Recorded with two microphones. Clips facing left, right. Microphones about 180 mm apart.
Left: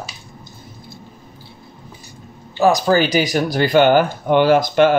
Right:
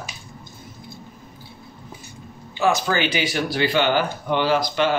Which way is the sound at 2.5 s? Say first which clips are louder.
Left 6 dB; 40° left (ahead or behind).